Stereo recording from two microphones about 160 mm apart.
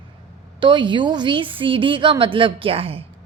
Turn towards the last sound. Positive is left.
turn(degrees=-35)  # may be behind; listen again after turning